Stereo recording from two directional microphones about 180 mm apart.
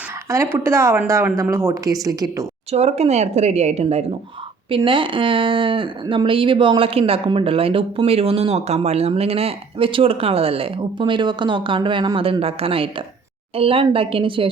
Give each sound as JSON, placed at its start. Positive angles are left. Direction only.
{"t": 0.3, "sound": "speech", "side_deg": -15}
{"t": 2.7, "sound": "a woman's voice", "side_deg": -35}